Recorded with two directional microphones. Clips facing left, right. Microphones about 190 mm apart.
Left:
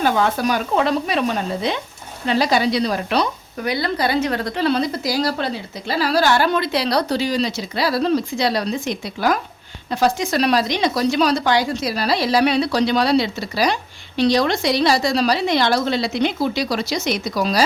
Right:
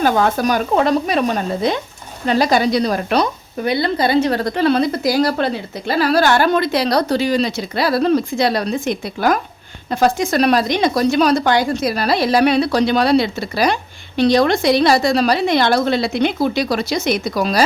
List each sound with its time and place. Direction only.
0.0 s a woman's voice: 45° right (ahead or behind)
3.6 s a woman's voice: 25° right (ahead or behind); by 17.6 s 55° right (ahead or behind)